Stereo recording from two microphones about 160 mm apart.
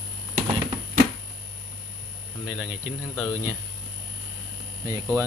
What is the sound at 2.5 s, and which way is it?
Speech, 10° right (ahead or behind).